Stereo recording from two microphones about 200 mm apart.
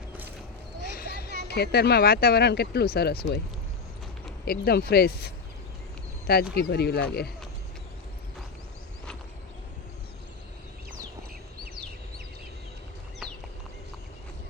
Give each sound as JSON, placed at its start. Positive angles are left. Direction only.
{"t": 0.9, "sound": "a sound", "side_deg": 50}
{"t": 1.5, "sound": "speech", "side_deg": 55}
{"t": 4.4, "sound": "speech", "side_deg": 50}